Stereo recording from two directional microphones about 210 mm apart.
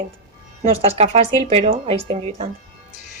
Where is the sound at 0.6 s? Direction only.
30° right (ahead or behind).